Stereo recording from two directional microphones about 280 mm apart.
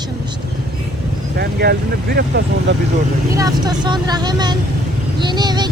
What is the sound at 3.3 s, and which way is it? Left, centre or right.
Speech, centre.